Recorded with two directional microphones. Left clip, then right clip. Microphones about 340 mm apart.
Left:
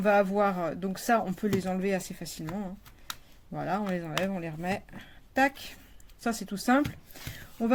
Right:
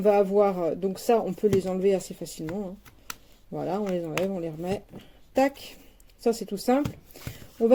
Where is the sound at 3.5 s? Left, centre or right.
Left.